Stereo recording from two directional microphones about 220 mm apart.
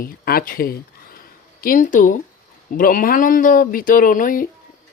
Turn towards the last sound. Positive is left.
turn(degrees=40)  # may be behind; listen again after turning